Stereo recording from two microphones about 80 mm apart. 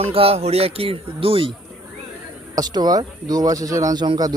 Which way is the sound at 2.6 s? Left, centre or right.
Right.